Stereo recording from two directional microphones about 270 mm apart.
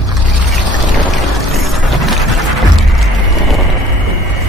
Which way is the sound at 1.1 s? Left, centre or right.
Centre.